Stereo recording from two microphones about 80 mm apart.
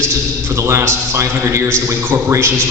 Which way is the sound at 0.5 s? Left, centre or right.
Right.